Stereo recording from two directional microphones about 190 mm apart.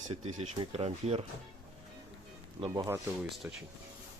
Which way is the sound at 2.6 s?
20° right (ahead or behind).